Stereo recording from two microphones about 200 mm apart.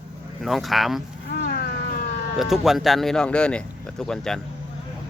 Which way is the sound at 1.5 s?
45° left (ahead or behind).